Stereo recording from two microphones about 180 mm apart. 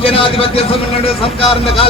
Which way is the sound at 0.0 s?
30° left (ahead or behind).